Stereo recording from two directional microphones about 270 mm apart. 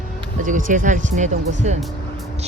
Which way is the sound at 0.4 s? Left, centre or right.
Right.